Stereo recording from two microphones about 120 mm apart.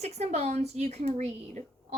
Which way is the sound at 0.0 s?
65° right (ahead or behind).